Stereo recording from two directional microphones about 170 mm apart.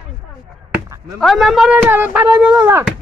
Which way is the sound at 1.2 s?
Centre (ahead or behind).